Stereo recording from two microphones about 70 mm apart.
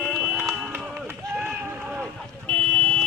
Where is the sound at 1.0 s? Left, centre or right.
Right.